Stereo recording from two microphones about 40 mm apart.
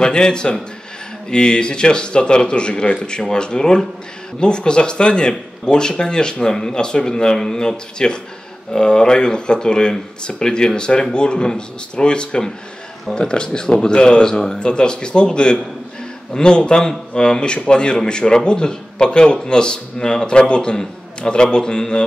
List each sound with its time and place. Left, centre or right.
0.0 s a man's voice: left